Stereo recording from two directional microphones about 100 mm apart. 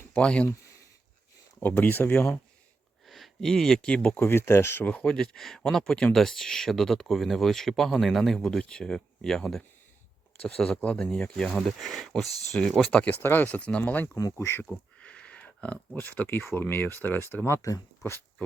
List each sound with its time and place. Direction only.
0.1 s speech: 10° left (ahead or behind)
1.5 s speech: 15° left (ahead or behind)
3.1 s speech: 5° left (ahead or behind)
4.2 s speech: 25° left (ahead or behind)
4.9 s speech: 10° left (ahead or behind)
14.2 s speech: 30° left (ahead or behind)
14.7 s a sound: 10° left (ahead or behind)
16.0 s speech: 20° left (ahead or behind)